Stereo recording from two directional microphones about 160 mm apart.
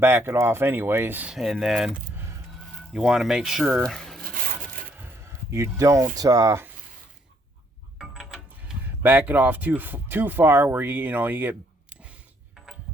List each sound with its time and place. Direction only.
0.0 s speech: 15° right (ahead or behind)
2.9 s speech: 5° right (ahead or behind)
4.2 s a sound: 60° right (ahead or behind)
4.9 s a sound: 20° right (ahead or behind)
6.1 s speech: 20° right (ahead or behind)
7.9 s speech: 5° right (ahead or behind)